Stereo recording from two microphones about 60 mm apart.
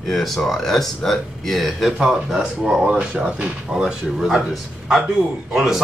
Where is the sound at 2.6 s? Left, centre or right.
Centre.